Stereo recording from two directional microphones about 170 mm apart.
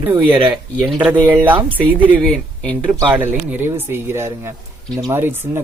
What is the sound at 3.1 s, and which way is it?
Speech, 10° right (ahead or behind).